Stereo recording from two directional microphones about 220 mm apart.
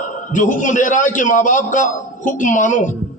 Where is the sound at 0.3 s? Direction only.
35° left (ahead or behind).